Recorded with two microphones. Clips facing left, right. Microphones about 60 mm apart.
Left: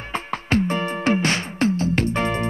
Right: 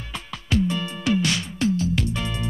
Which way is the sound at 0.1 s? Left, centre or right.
Left.